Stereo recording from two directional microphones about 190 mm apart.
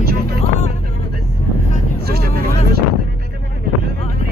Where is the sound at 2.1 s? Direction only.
55° right (ahead or behind).